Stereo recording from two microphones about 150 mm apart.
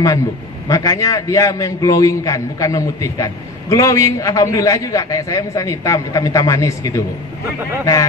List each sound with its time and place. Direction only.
0.7 s a man's voice: 20° left (ahead or behind)